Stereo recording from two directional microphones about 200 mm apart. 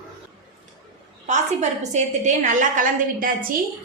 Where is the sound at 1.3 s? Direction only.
35° right (ahead or behind).